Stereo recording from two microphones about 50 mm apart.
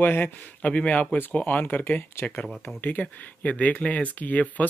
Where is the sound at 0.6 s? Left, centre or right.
Left.